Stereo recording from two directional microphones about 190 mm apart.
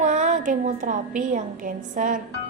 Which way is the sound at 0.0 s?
40° right (ahead or behind).